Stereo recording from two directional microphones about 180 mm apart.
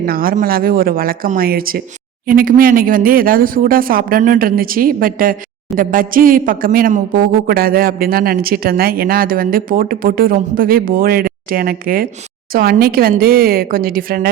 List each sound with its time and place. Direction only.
0.0 s speech: 55° right (ahead or behind)